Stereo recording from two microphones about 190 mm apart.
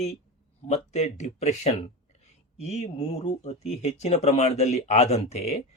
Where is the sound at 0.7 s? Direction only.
35° left (ahead or behind).